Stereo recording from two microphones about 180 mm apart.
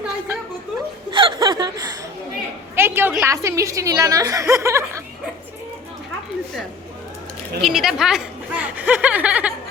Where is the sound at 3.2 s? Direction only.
15° right (ahead or behind).